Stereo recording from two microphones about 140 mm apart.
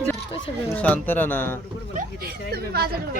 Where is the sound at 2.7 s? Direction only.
90° right.